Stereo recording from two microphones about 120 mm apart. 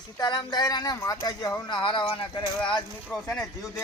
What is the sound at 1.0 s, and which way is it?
Speech, 20° left (ahead or behind).